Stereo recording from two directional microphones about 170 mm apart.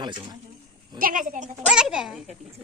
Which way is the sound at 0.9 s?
55° right (ahead or behind).